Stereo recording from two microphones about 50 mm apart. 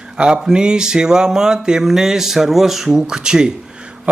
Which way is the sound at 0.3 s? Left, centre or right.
Centre.